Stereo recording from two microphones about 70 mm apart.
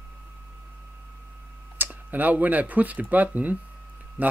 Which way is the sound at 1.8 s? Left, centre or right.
Right.